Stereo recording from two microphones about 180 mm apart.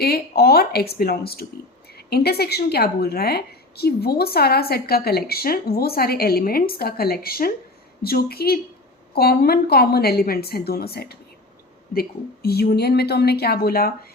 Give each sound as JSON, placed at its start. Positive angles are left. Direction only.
{"t": 0.0, "sound": "a woman's voice", "side_deg": 60}